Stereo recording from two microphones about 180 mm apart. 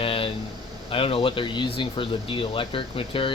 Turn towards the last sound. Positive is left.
turn(degrees=30)  # may be behind; listen again after turning